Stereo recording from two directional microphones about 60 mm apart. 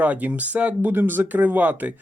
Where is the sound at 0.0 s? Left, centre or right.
Right.